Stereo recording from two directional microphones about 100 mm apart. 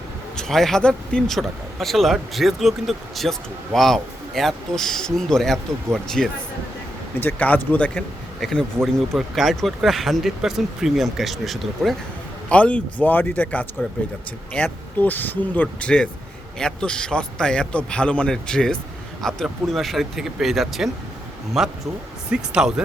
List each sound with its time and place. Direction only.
0.3 s speech: 5° left (ahead or behind)
7.2 s a man's voice: 15° left (ahead or behind)
8.4 s speech: 5° left (ahead or behind)
12.5 s a man's voice: 15° left (ahead or behind); by 22.7 s 10° right (ahead or behind)